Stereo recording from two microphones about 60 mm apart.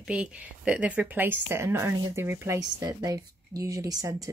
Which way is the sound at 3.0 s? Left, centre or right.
Right.